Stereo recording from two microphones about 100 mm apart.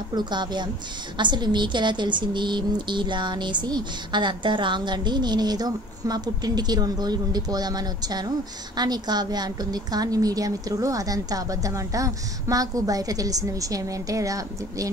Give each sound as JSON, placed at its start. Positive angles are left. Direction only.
{"t": 0.1, "sound": "a woman's voice", "side_deg": -45}